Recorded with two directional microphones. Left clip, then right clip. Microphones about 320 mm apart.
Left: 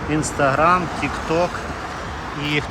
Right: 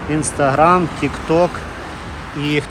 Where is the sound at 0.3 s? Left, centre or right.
Centre.